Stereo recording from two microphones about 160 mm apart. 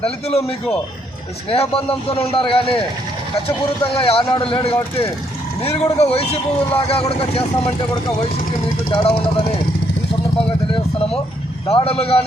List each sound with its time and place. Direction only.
0.0 s speech: 40° left (ahead or behind)
3.9 s speech: 35° left (ahead or behind)
8.9 s speech: 30° left (ahead or behind)
11.7 s speech: 35° left (ahead or behind)